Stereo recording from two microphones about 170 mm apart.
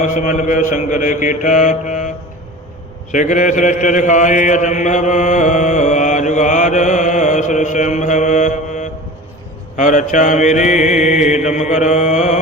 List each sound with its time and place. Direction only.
0.0 s mantra: 50° left (ahead or behind)
3.1 s mantra: 45° left (ahead or behind)